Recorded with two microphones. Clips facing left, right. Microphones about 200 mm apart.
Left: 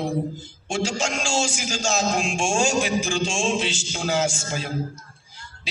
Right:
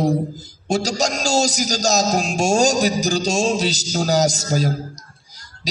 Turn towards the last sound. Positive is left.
turn(degrees=-40)  # may be behind; listen again after turning